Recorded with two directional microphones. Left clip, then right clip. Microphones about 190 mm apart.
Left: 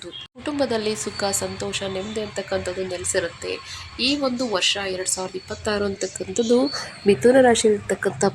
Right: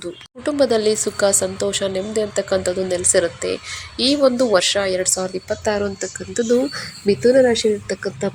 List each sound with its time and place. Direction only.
0.0 s a woman's voice: 15° right (ahead or behind)